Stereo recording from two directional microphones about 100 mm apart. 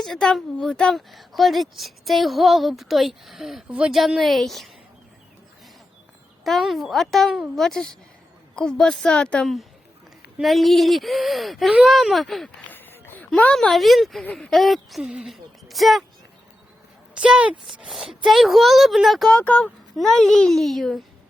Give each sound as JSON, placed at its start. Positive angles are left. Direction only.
{"t": 0.0, "sound": "a woman's voice", "side_deg": 5}
{"t": 6.4, "sound": "a woman's voice", "side_deg": 0}
{"t": 12.7, "sound": "a sound", "side_deg": 20}
{"t": 13.3, "sound": "a woman's voice", "side_deg": 10}
{"t": 17.2, "sound": "a woman's voice", "side_deg": -10}
{"t": 19.4, "sound": "a woman's voice", "side_deg": 10}